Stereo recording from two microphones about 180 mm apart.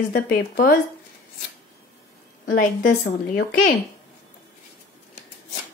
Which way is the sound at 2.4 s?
50° left (ahead or behind).